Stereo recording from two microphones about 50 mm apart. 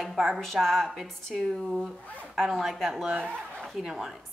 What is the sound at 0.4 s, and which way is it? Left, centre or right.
Speech, centre.